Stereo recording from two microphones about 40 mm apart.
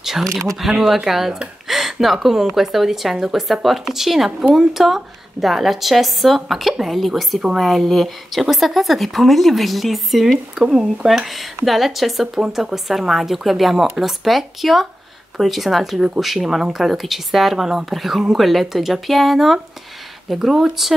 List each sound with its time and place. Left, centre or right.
0.2 s speech: centre
0.6 s speech: centre
1.7 s a sound: centre
2.2 s a woman's voice: centre
10.6 s speech: centre
11.1 s a woman's voice: centre